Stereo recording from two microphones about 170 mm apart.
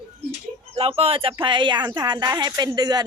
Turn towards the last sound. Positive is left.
turn(degrees=-25)  # may be behind; listen again after turning